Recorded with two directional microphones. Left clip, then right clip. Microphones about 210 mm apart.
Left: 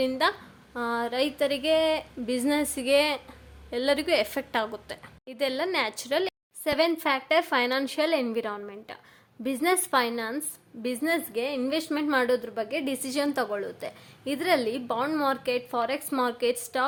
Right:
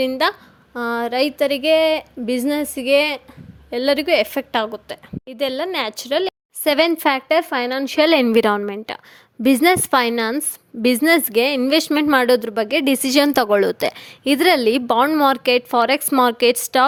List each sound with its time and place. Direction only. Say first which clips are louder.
0.0 s a woman's voice: right 7 dB; 30° right (ahead or behind)
6.7 s a woman's voice: right 9 dB; 40° right (ahead or behind); by 7.9 s 25° right (ahead or behind)
7.9 s a woman's voice: right 17 dB; 40° right (ahead or behind)